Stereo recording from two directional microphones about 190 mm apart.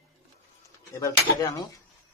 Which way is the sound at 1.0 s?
20° left (ahead or behind).